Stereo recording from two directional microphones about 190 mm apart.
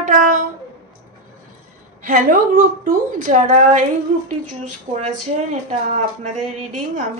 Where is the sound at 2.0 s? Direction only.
45° right (ahead or behind).